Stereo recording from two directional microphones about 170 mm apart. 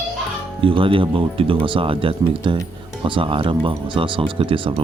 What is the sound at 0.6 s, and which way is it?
Speech, 30° right (ahead or behind).